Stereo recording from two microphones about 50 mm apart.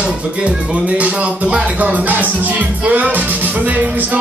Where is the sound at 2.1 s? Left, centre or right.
Right.